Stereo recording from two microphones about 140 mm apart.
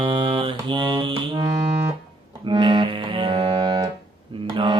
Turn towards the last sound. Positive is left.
turn(degrees=-35)  # may be behind; listen again after turning